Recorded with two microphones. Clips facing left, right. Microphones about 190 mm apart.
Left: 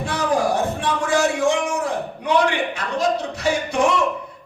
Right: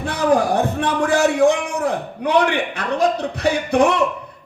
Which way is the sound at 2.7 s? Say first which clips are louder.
Right 3 dB; 60° right (ahead or behind).